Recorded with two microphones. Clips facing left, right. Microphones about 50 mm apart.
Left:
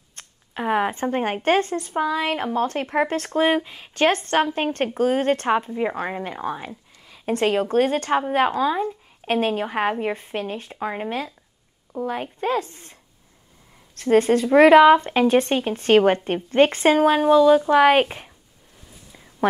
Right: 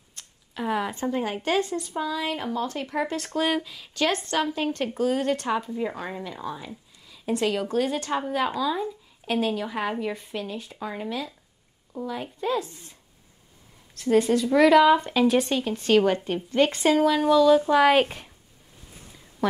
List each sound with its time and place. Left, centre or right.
0.1 s speech: left
3.3 s speech: left
13.9 s speech: left